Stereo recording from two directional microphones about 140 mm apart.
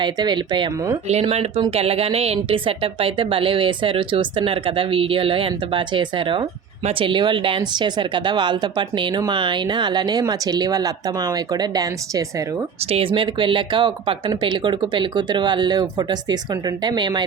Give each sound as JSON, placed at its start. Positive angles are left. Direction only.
{"t": 0.0, "sound": "speech", "side_deg": -30}
{"t": 1.0, "sound": "speech", "side_deg": -50}
{"t": 12.9, "sound": "speech", "side_deg": -40}